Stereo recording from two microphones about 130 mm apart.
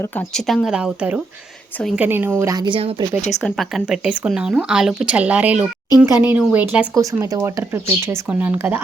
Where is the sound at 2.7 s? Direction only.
50° right (ahead or behind).